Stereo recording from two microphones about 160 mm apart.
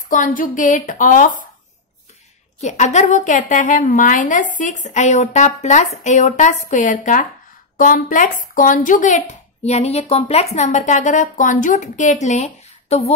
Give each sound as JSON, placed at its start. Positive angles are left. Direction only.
{"t": 0.1, "sound": "speech", "side_deg": 55}
{"t": 2.6, "sound": "a woman's voice", "side_deg": 45}